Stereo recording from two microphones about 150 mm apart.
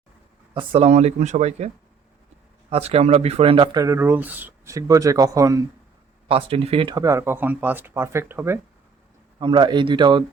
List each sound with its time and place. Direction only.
0.5 s speech: 40° right (ahead or behind); by 5.6 s 20° right (ahead or behind)
6.2 s a man's voice: 40° right (ahead or behind)
6.9 s speech: 20° right (ahead or behind)
9.4 s a man's voice: 30° right (ahead or behind)